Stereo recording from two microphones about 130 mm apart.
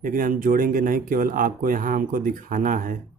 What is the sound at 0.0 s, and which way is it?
Speech, 90° right.